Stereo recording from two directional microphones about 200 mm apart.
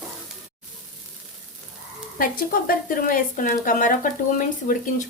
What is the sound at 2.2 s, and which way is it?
Speech, 45° left (ahead or behind).